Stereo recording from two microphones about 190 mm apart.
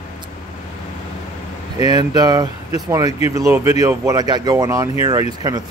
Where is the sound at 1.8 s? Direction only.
20° right (ahead or behind).